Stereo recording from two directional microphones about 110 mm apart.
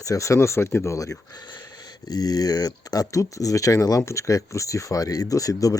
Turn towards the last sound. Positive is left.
turn(degrees=30)  # may be behind; listen again after turning